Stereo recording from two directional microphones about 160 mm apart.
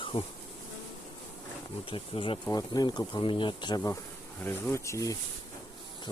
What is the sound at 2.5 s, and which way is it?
Speech, 25° left (ahead or behind).